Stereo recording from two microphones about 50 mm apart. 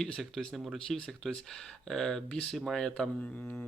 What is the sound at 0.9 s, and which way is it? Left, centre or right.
Speech, centre.